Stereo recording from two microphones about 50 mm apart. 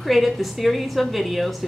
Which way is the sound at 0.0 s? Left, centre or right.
Centre.